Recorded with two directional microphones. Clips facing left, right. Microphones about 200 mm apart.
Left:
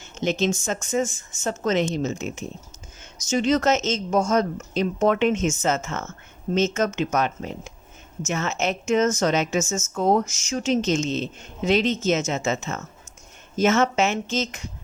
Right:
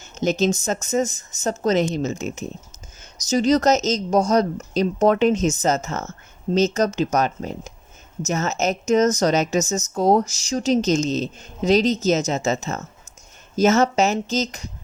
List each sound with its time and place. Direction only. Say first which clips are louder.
0.0 s speech: right 3 dB; 40° right (ahead or behind)